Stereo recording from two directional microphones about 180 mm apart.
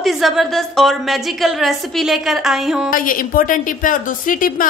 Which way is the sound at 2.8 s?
50° left (ahead or behind).